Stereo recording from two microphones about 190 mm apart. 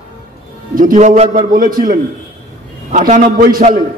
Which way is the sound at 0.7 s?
45° right (ahead or behind).